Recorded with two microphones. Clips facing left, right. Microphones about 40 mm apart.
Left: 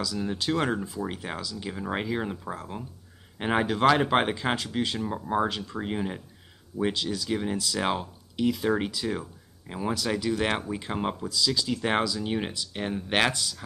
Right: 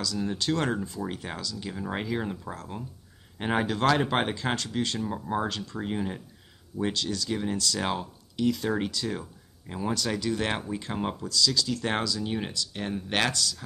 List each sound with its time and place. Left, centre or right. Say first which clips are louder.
0.0 s speech: even; centre